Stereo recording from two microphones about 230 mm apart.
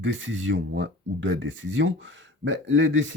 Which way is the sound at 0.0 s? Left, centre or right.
Right.